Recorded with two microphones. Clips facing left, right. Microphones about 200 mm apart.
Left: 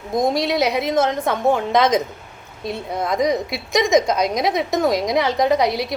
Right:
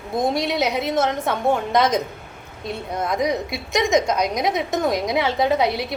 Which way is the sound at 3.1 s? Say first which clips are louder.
Left 3 dB; centre (ahead or behind).